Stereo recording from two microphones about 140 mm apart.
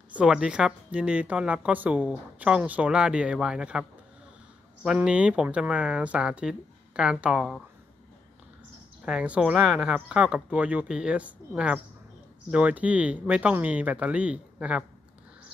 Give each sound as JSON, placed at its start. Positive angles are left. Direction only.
{"t": 0.1, "sound": "a woman's voice", "side_deg": -5}
{"t": 4.8, "sound": "a woman's voice", "side_deg": -5}
{"t": 9.0, "sound": "a woman's voice", "side_deg": -5}